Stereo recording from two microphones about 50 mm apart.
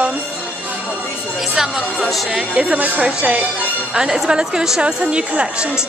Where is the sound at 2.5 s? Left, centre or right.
Centre.